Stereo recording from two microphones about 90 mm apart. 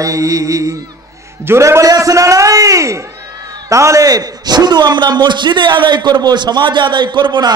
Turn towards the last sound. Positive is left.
turn(degrees=-55)  # may be behind; listen again after turning